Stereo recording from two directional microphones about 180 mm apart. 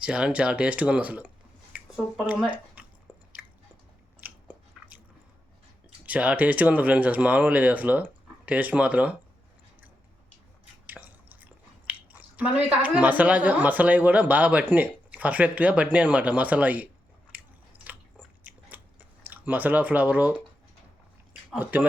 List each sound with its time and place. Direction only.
0.0 s speech: 5° right (ahead or behind)
2.8 s a sound: 5° right (ahead or behind)
3.4 s biting: 5° right (ahead or behind)
6.1 s speech: 10° right (ahead or behind)
10.8 s drip: 10° right (ahead or behind)
11.9 s speech: 10° right (ahead or behind)
17.3 s biting: 5° right (ahead or behind)
18.4 s chewing: 10° right (ahead or behind)
21.5 s speech: 10° right (ahead or behind)